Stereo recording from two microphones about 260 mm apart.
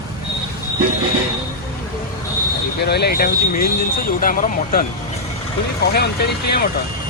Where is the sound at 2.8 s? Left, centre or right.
Left.